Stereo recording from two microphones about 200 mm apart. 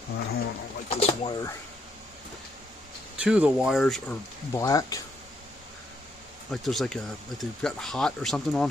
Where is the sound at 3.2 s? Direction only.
5° right (ahead or behind).